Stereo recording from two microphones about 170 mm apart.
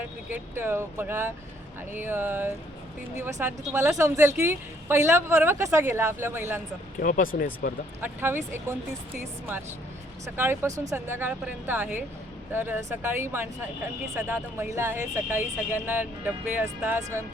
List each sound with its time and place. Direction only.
0.3 s speech: 10° right (ahead or behind)
7.0 s speech: 55° left (ahead or behind)
8.0 s speech: 15° right (ahead or behind)
10.2 s speech: 15° right (ahead or behind)